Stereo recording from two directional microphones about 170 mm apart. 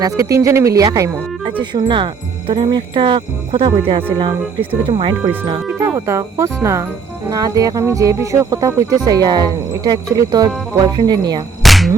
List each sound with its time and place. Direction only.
0.0 s speech: 20° right (ahead or behind)
5.8 s speech: 15° right (ahead or behind)
11.6 s music: centre (ahead or behind)